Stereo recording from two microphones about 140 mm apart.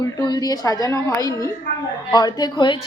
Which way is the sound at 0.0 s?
30° left (ahead or behind).